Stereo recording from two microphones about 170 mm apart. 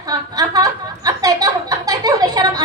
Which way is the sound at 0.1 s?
20° right (ahead or behind).